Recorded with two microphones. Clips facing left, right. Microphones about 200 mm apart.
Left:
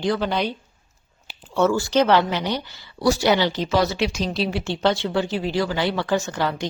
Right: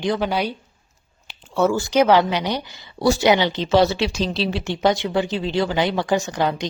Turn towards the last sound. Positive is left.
turn(degrees=-15)  # may be behind; listen again after turning